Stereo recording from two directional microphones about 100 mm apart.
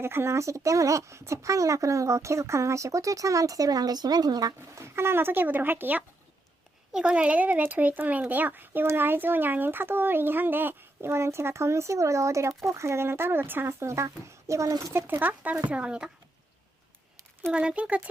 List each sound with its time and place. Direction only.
0.0 s speech: 25° right (ahead or behind)
17.5 s speech: 10° right (ahead or behind)